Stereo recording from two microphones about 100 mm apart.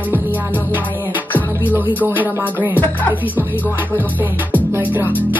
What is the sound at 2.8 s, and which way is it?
Speech, 15° left (ahead or behind).